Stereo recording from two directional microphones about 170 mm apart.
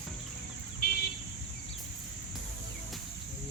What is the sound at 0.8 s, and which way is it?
Vehicle, 65° left (ahead or behind).